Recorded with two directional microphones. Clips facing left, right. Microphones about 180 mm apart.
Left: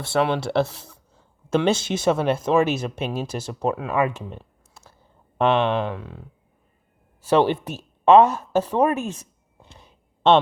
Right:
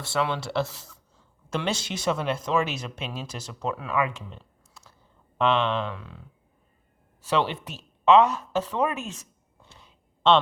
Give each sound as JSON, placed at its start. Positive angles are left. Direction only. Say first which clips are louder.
{"t": 0.0, "sound": "a man's voice", "louder": "left 6 dB", "side_deg": 60}
{"t": 7.3, "sound": "speech", "louder": "left 7 dB", "side_deg": 50}
{"t": 9.6, "sound": "a sound", "louder": "left 4 dB", "side_deg": 20}